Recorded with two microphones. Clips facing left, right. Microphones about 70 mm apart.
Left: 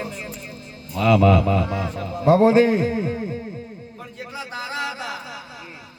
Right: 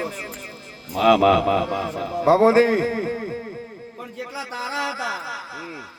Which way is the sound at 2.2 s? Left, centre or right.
Right.